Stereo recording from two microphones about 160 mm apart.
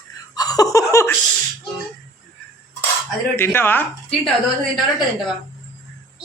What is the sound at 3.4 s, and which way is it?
Speech, 15° left (ahead or behind).